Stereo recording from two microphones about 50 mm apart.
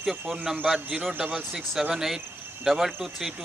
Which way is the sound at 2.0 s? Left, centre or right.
Centre.